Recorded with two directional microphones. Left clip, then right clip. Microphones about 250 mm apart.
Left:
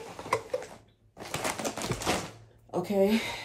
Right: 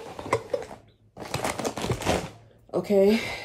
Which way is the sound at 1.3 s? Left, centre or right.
Right.